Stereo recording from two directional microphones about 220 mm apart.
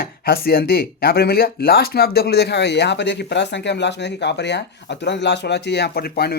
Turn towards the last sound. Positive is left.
turn(degrees=45)  # may be behind; listen again after turning